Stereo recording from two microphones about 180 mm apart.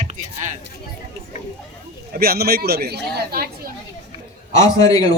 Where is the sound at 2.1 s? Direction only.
60° right (ahead or behind).